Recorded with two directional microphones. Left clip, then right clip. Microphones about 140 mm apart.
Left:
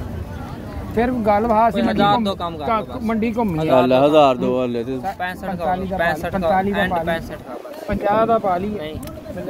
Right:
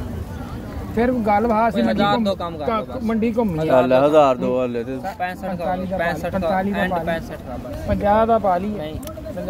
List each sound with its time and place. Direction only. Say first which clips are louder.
0.9 s speech: left 1 dB; 55° left (ahead or behind)
4.3 s speech: left 1 dB; 40° left (ahead or behind)
4.6 s speech: left 1 dB; 55° left (ahead or behind)
7.9 s speech: even; 40° left (ahead or behind)